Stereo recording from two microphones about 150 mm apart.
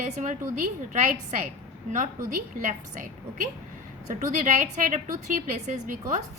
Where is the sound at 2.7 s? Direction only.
60° right (ahead or behind).